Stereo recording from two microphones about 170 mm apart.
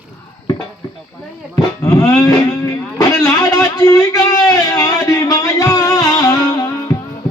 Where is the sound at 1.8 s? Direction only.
20° left (ahead or behind).